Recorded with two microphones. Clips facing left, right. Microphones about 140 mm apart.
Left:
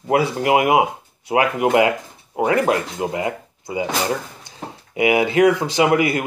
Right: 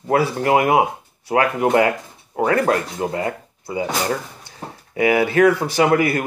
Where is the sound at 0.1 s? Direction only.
15° left (ahead or behind).